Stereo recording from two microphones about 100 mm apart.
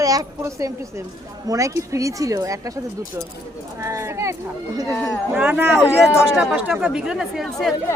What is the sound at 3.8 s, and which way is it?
Speech, 30° right (ahead or behind).